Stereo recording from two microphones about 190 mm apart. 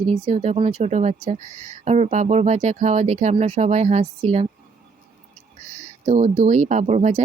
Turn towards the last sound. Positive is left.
turn(degrees=-35)  # may be behind; listen again after turning